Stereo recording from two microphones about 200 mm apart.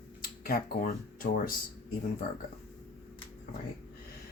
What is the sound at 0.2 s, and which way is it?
Speech, 45° left (ahead or behind).